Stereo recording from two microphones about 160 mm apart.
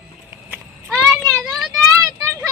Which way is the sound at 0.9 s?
10° left (ahead or behind).